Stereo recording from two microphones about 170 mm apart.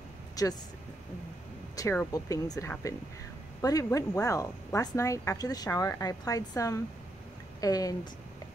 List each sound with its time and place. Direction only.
0.4 s speech: 20° left (ahead or behind)
1.8 s speech: 20° left (ahead or behind)